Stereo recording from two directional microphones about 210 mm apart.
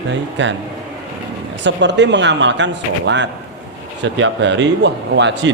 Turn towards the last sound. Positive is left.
turn(degrees=-60)  # may be behind; listen again after turning